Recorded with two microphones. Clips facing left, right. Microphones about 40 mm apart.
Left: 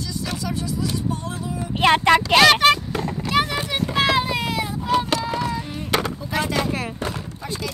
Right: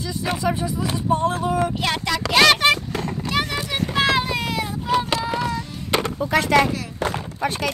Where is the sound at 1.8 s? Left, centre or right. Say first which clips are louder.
Left 8 dB; left.